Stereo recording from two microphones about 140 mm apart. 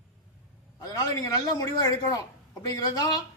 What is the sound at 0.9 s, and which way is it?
Speech, 25° left (ahead or behind).